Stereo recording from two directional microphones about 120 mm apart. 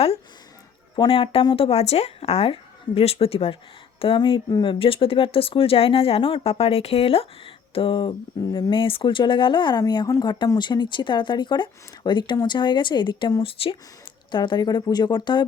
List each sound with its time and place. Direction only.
0.9 s speech: 50° left (ahead or behind)